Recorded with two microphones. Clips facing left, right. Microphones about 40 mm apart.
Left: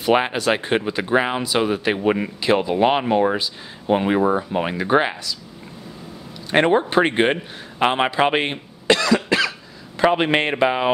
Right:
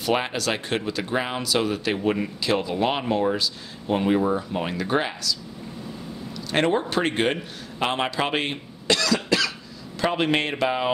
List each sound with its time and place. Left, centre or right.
0.1 s speech: left
6.5 s speech: left